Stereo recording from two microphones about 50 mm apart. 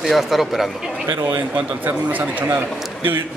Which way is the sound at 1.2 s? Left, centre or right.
Right.